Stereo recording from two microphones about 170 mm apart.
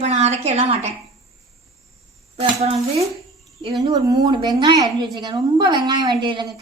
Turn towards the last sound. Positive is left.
turn(degrees=-25)  # may be behind; listen again after turning